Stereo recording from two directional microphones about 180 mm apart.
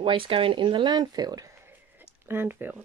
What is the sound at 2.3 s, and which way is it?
Speech, 10° right (ahead or behind).